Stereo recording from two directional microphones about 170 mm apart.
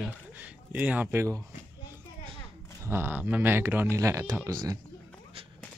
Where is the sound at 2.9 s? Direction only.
15° right (ahead or behind).